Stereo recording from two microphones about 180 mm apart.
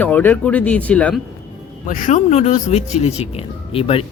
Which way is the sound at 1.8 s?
45° left (ahead or behind).